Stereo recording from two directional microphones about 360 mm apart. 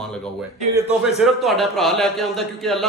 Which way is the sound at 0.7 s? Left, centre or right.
Centre.